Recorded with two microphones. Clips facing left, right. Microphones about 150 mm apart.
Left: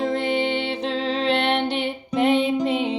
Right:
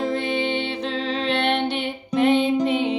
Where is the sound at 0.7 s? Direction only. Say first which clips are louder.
Left 1 dB; 30° left (ahead or behind).